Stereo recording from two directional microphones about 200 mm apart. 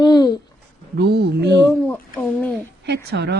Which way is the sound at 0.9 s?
55° right (ahead or behind).